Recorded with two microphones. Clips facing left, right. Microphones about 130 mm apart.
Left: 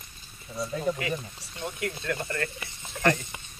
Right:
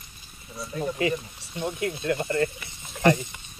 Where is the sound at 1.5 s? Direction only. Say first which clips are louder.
Right 5 dB; 15° right (ahead or behind).